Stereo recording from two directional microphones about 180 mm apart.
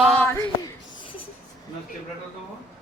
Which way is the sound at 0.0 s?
10° left (ahead or behind).